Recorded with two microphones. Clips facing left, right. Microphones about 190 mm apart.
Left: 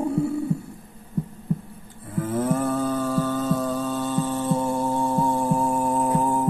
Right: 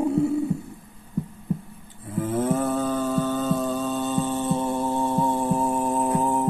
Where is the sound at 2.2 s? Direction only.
5° right (ahead or behind).